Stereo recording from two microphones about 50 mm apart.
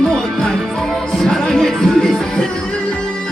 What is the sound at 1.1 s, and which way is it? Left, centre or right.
Music, centre.